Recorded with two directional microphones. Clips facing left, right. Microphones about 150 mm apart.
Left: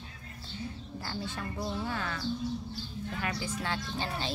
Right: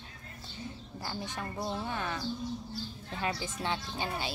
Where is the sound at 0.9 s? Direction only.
20° right (ahead or behind).